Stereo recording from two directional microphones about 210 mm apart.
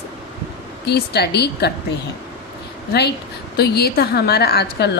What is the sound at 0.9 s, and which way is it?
Speech, 50° left (ahead or behind).